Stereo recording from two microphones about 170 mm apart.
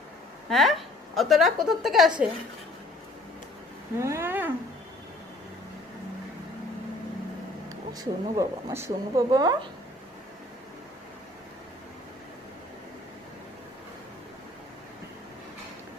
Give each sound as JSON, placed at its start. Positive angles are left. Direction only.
{"t": 0.4, "sound": "a woman's voice", "side_deg": 0}
{"t": 4.0, "sound": "speech", "side_deg": -15}
{"t": 7.9, "sound": "speech", "side_deg": -15}